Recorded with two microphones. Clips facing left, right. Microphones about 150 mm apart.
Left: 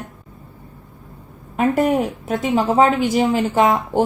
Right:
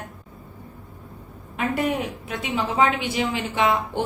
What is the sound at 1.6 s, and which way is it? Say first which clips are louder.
A woman's voice: left 7 dB; 45° left (ahead or behind).